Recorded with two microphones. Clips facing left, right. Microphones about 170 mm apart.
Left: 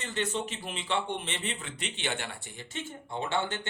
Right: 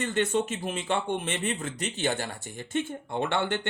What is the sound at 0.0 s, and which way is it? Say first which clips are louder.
A man's voice: right 6 dB; 50° right (ahead or behind).